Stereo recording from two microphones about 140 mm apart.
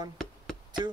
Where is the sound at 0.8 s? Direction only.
30° right (ahead or behind).